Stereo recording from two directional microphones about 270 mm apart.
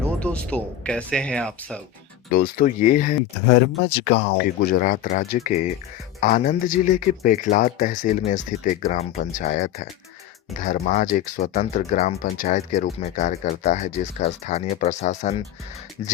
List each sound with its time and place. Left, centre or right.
0.2 s speech: centre
2.3 s speech: left